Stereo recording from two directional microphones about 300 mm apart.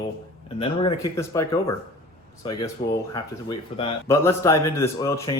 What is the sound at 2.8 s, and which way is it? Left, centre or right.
Speech, centre.